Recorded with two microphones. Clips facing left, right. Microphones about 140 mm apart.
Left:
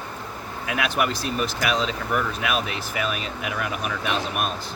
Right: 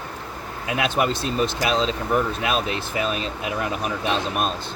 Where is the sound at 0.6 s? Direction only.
25° right (ahead or behind).